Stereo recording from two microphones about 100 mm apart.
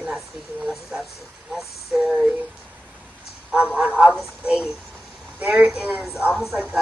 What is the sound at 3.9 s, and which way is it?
A woman's voice, 5° right (ahead or behind).